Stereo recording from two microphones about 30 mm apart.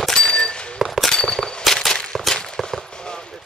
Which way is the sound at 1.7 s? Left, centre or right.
Centre.